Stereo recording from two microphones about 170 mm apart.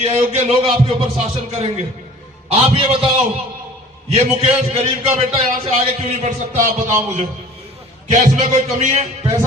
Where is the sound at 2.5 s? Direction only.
35° right (ahead or behind).